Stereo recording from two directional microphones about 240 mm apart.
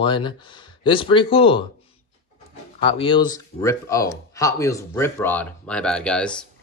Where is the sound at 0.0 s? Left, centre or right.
Centre.